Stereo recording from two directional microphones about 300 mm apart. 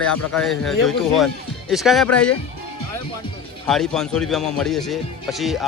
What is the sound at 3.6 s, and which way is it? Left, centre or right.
Speech, centre.